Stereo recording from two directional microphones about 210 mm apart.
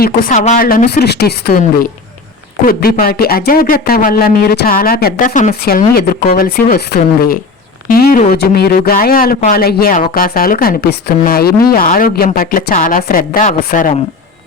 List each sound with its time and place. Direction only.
0.0 s speech: 40° left (ahead or behind)